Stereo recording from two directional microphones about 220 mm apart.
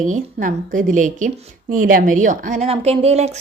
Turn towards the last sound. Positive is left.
turn(degrees=-30)  # may be behind; listen again after turning